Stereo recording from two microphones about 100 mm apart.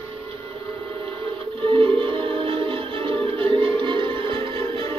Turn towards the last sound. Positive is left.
turn(degrees=-65)  # may be behind; listen again after turning